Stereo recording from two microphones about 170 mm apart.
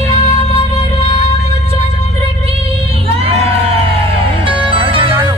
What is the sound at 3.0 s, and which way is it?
Crowd, 35° right (ahead or behind).